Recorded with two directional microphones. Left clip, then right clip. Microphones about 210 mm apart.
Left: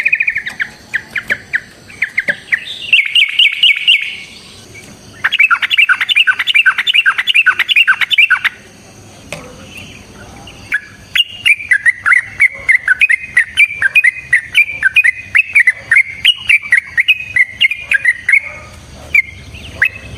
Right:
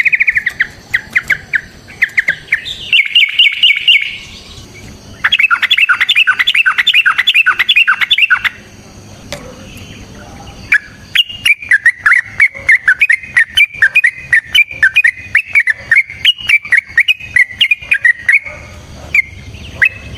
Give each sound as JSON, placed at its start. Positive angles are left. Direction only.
{"t": 0.4, "sound": "bird", "side_deg": -40}
{"t": 2.5, "sound": "chirp", "side_deg": 0}
{"t": 5.2, "sound": "bird", "side_deg": -5}
{"t": 10.7, "sound": "a sound", "side_deg": -20}
{"t": 19.1, "sound": "bird", "side_deg": -5}
{"t": 19.8, "sound": "fowl", "side_deg": 0}